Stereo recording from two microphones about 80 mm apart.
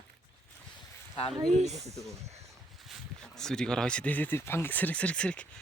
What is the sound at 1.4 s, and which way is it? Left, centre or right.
Speech, right.